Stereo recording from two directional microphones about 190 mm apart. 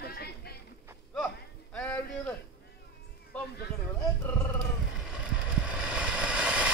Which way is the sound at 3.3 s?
10° left (ahead or behind).